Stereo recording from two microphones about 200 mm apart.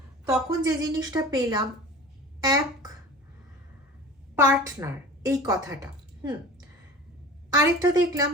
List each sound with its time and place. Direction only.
0.6 s a woman's voice: 20° right (ahead or behind)
4.4 s a woman's voice: 10° right (ahead or behind)
7.5 s a woman's voice: 20° right (ahead or behind)